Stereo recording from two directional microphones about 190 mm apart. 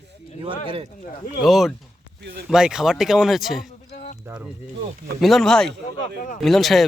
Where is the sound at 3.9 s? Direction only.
40° left (ahead or behind).